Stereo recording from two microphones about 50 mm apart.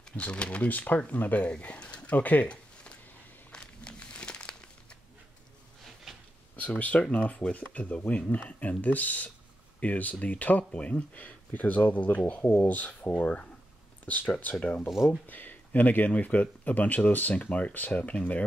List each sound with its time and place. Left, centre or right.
0.1 s speech: left
0.7 s speech: left
1.5 s speech: left
2.1 s speech: left
2.4 s a sound: left
3.5 s crumpling: centre
6.5 s speech: left